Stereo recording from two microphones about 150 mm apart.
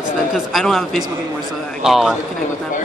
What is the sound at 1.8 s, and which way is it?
Speech, centre (ahead or behind).